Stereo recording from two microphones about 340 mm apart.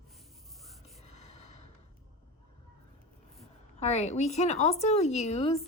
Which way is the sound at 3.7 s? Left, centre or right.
Centre.